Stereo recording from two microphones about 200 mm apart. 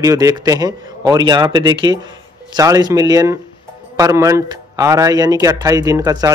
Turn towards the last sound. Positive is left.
turn(degrees=-15)  # may be behind; listen again after turning